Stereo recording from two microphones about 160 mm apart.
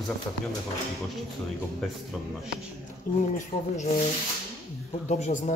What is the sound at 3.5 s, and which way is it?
Speech, 70° left (ahead or behind).